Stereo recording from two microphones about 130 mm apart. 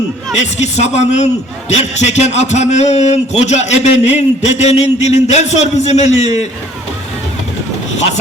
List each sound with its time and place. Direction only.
0.3 s a man's voice: 60° left (ahead or behind)